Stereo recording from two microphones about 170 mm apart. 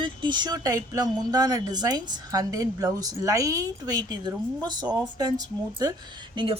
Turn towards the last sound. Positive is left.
turn(degrees=-30)  # may be behind; listen again after turning